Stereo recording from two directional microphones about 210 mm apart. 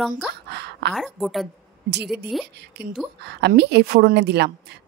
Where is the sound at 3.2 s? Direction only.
55° right (ahead or behind).